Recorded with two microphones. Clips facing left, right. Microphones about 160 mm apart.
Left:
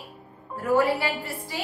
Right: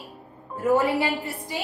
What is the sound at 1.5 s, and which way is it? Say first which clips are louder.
Speech: right 1 dB; 20° right (ahead or behind).